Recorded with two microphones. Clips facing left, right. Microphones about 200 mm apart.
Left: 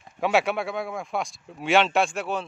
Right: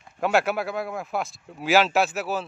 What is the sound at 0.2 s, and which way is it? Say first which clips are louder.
Speech: even; centre (ahead or behind).